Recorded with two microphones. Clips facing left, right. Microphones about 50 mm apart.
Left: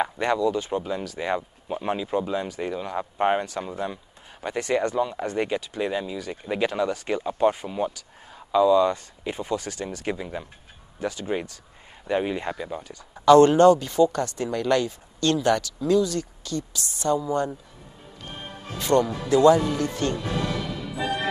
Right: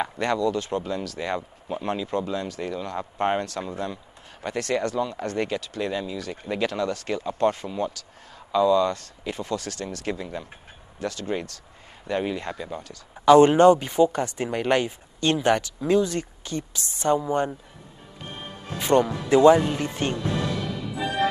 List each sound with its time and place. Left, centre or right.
0.0 s speech: centre
13.2 s speech: centre
18.8 s speech: right
20.5 s music: centre